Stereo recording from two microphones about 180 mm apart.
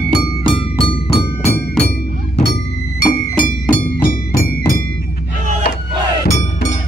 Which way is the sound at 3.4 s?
50° left (ahead or behind).